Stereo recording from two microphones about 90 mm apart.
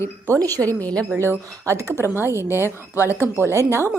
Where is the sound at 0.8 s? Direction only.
15° left (ahead or behind).